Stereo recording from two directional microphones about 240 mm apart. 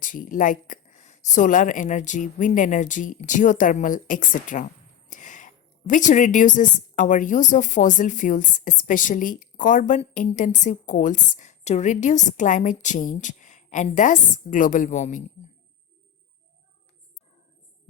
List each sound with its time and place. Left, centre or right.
0.0 s a woman's voice: left